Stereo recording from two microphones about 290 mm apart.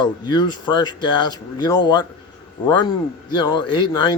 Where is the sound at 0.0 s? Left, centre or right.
Centre.